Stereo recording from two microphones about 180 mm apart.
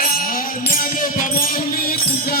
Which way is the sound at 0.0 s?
55° left (ahead or behind).